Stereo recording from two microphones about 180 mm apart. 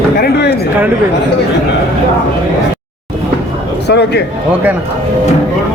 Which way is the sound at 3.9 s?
65° left (ahead or behind).